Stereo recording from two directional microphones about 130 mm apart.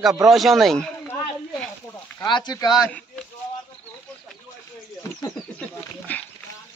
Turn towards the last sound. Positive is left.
turn(degrees=10)  # may be behind; listen again after turning